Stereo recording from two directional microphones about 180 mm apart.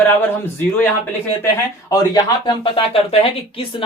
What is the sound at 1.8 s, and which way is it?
Speech, 20° left (ahead or behind).